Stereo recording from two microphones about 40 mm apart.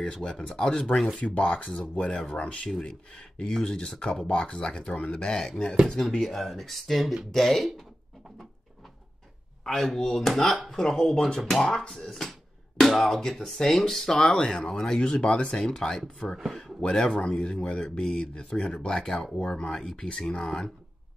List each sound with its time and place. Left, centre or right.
0.0 s speech: centre
9.7 s speech: centre
16.3 s speech: centre
17.2 s speech: left